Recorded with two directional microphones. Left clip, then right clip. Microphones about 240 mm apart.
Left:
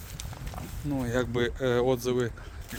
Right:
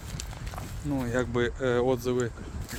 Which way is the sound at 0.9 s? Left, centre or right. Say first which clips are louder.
Even; centre.